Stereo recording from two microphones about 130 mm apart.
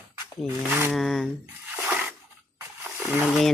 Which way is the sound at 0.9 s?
Centre (ahead or behind).